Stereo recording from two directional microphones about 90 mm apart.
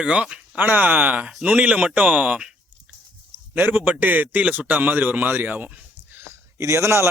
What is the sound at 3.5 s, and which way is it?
A man's voice, 20° right (ahead or behind).